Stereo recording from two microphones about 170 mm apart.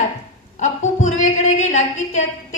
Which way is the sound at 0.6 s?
45° left (ahead or behind).